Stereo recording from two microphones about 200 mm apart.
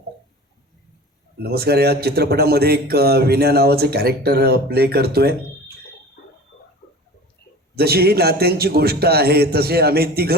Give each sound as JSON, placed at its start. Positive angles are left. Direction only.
{"t": 1.4, "sound": "speech", "side_deg": -55}
{"t": 7.8, "sound": "speech", "side_deg": -50}